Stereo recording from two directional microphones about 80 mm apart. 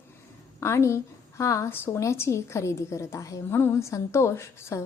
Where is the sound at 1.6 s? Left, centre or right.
Left.